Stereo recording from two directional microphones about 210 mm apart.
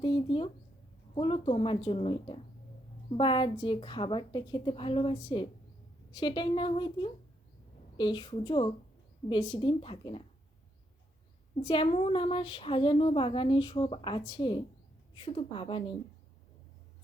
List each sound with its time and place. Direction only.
0.0 s speech: 25° left (ahead or behind)
11.6 s speech: 25° left (ahead or behind)